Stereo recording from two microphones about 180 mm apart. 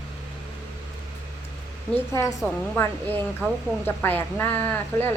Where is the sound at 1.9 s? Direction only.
15° left (ahead or behind).